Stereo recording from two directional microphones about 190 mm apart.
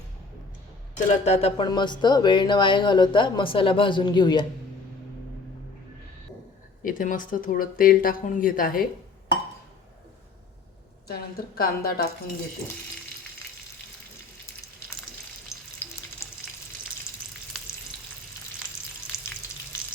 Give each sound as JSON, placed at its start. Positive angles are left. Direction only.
{"t": 0.9, "sound": "speech", "side_deg": 40}
{"t": 6.8, "sound": "speech", "side_deg": 45}
{"t": 11.1, "sound": "speech", "side_deg": 55}
{"t": 15.5, "sound": "frying", "side_deg": 15}